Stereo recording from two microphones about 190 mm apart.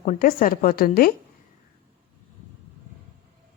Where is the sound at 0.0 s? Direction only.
45° left (ahead or behind).